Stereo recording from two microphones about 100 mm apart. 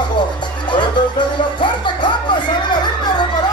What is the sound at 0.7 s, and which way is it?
Music, 50° left (ahead or behind).